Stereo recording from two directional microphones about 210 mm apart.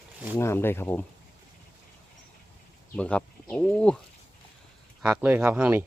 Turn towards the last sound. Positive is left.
turn(degrees=-10)  # may be behind; listen again after turning